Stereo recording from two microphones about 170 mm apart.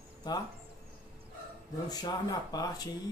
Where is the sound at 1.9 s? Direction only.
25° left (ahead or behind).